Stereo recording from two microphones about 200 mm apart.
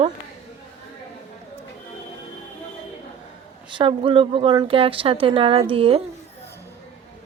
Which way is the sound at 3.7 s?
25° right (ahead or behind).